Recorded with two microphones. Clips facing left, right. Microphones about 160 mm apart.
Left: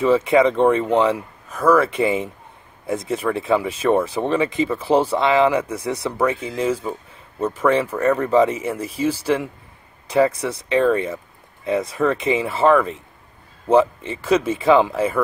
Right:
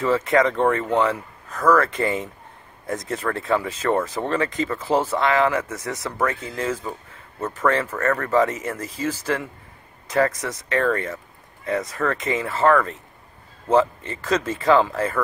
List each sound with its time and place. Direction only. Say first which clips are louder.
0.0 s speech: left 4 dB; 15° left (ahead or behind)